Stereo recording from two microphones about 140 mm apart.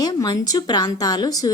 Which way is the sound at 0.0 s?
30° left (ahead or behind).